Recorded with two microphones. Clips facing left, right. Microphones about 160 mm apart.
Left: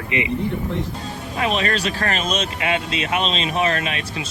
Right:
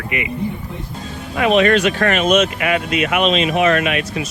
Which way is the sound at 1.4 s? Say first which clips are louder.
Right 8 dB; 35° left (ahead or behind).